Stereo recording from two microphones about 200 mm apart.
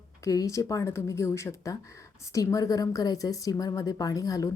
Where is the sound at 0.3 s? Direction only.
15° left (ahead or behind).